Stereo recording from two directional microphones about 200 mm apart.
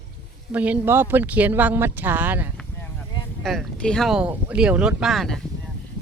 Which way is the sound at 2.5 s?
10° left (ahead or behind).